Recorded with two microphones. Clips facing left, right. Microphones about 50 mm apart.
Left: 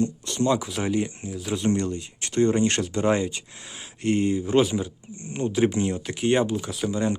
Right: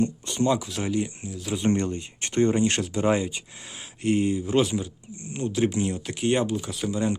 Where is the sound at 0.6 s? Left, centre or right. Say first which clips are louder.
Left 2 dB; centre.